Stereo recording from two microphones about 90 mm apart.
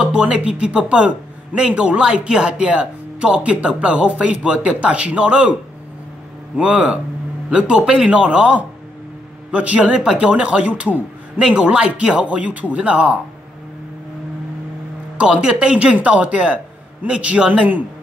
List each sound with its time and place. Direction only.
0.0 s a man's voice: 10° right (ahead or behind)
15.1 s a man's voice: 10° right (ahead or behind)